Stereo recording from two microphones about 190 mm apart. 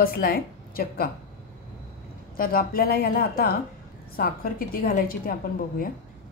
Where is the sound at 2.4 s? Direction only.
50° left (ahead or behind).